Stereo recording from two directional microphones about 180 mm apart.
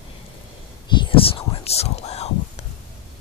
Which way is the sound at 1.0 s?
30° left (ahead or behind).